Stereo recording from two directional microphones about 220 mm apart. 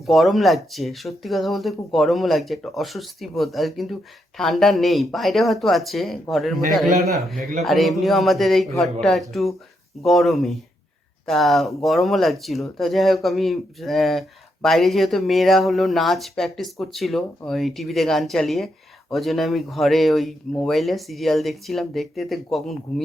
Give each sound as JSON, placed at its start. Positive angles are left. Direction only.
{"t": 0.0, "sound": "speech", "side_deg": 0}
{"t": 7.6, "sound": "speech", "side_deg": 0}